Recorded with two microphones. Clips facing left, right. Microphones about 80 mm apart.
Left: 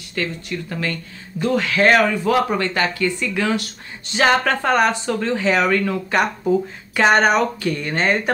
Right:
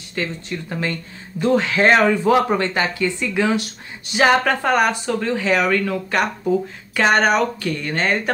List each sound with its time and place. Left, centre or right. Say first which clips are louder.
0.1 s speech: left 1 dB; centre